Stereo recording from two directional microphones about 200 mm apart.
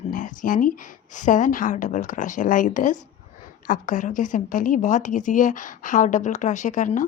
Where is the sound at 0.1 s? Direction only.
40° left (ahead or behind).